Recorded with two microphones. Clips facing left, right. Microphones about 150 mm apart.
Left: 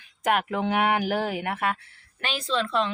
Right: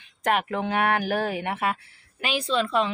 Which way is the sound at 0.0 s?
5° left (ahead or behind).